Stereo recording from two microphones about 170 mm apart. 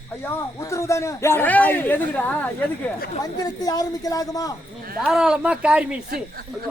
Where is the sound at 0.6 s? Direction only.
15° left (ahead or behind).